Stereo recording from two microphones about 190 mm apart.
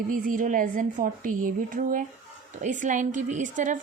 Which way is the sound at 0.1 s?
45° right (ahead or behind).